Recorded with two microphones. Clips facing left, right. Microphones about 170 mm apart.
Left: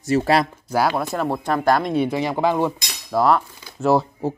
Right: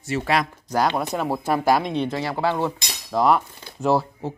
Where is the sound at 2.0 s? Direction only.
15° left (ahead or behind).